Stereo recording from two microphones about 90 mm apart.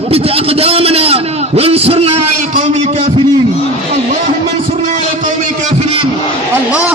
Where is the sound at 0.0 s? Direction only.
90° right.